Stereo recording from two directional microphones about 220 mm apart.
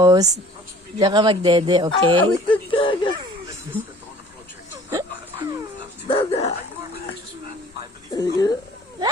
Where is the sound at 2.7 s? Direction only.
25° left (ahead or behind).